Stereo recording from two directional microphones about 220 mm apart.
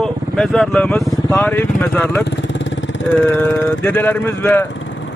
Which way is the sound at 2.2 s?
55° left (ahead or behind).